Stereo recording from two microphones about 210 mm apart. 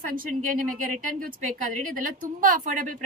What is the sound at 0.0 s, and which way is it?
A woman's voice, 40° right (ahead or behind).